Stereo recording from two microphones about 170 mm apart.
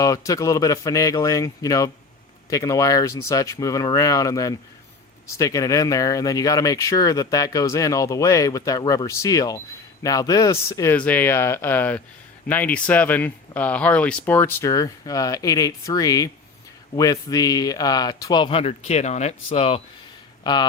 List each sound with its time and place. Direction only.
0.0 s speech: 20° left (ahead or behind); by 19.8 s 35° left (ahead or behind)
20.4 s speech: 25° left (ahead or behind)